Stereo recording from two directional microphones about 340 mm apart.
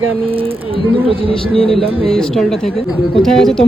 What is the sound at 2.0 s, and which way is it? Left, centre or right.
Speech, centre.